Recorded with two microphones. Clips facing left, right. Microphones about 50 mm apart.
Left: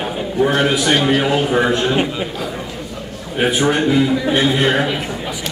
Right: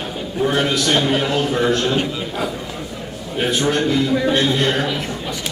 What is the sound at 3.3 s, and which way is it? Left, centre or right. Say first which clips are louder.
A man's voice: left 3 dB; centre.